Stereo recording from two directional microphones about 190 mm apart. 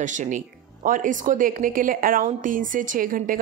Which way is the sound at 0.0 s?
40° right (ahead or behind).